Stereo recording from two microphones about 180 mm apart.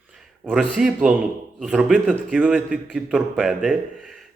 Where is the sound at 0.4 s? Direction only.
Centre (ahead or behind).